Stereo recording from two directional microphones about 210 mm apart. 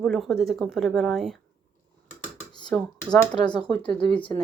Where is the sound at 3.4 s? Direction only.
20° left (ahead or behind).